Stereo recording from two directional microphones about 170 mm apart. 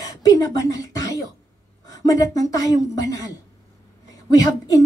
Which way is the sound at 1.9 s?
20° left (ahead or behind).